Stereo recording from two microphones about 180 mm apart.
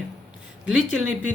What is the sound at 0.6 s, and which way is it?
Speech, 5° right (ahead or behind).